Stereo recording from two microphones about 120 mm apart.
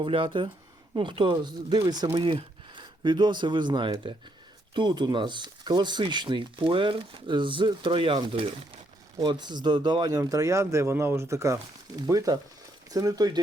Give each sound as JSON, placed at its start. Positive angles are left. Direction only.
{"t": 0.0, "sound": "speech", "side_deg": -45}
{"t": 9.2, "sound": "speech", "side_deg": -40}